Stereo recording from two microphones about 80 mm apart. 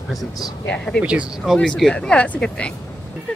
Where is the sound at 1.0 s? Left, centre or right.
Centre.